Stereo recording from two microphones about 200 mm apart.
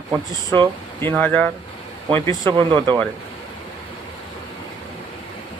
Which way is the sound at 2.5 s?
20° right (ahead or behind).